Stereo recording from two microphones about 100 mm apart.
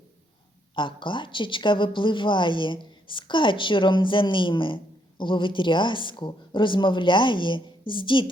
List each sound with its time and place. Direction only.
0.8 s speech: 55° left (ahead or behind)